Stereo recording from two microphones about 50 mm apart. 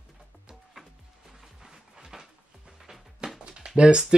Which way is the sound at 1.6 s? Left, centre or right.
Centre.